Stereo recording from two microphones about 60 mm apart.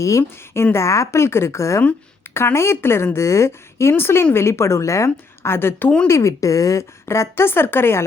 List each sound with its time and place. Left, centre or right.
0.0 s speech: left
2.3 s speech: left
6.1 s speech: left